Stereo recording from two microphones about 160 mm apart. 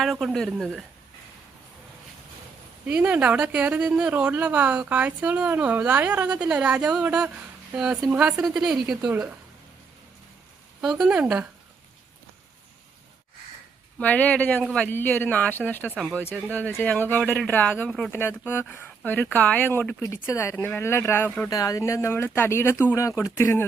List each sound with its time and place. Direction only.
0.0 s speech: centre (ahead or behind)
2.8 s speech: 5° right (ahead or behind)
10.8 s speech: 5° right (ahead or behind)
14.0 s speech: 10° left (ahead or behind)
18.2 s speech: 15° left (ahead or behind)